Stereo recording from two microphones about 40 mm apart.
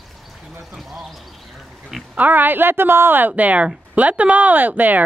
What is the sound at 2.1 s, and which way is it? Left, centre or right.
Speech, right.